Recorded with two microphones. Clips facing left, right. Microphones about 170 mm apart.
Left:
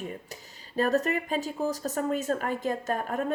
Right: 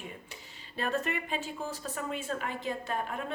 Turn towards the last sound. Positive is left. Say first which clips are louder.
# left 5 dB
turn(degrees=45)  # may be behind; listen again after turning